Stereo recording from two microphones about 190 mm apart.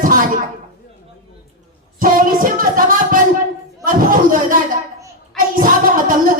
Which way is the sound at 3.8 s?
45° right (ahead or behind).